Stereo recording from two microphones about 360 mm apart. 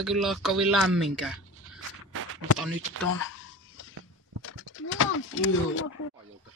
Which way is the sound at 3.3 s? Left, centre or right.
Left.